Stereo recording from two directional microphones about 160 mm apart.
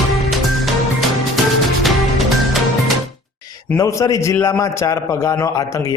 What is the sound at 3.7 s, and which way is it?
A man's voice, 20° left (ahead or behind).